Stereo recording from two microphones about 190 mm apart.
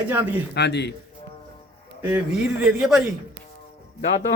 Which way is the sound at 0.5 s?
65° left (ahead or behind).